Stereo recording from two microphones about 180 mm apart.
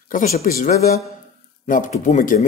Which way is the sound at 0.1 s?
45° left (ahead or behind).